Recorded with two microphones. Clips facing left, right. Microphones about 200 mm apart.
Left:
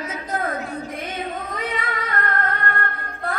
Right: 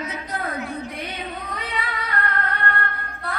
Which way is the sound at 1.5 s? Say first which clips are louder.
Left 3 dB; 45° left (ahead or behind).